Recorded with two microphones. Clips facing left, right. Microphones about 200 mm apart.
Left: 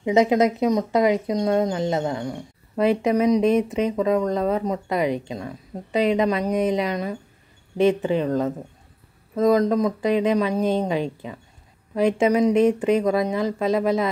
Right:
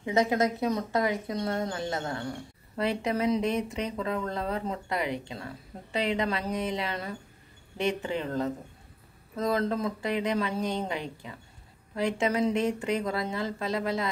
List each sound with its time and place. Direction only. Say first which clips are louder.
0.0 s speech: left 7 dB; 20° left (ahead or behind)
9.6 s speech: left 9 dB; 15° left (ahead or behind)